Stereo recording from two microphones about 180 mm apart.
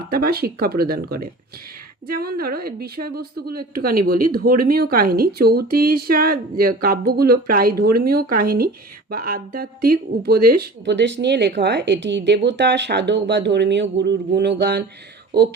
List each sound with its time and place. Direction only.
0.1 s speech: 55° right (ahead or behind)